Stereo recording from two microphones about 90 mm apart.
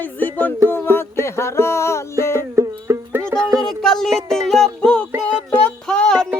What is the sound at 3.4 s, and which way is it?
Music, 5° left (ahead or behind).